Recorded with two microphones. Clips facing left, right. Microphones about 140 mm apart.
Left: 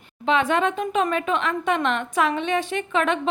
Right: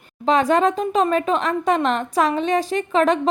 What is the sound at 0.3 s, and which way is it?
A woman's voice, 40° right (ahead or behind).